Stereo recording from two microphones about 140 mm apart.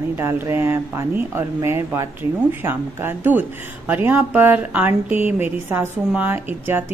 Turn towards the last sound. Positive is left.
turn(degrees=-15)  # may be behind; listen again after turning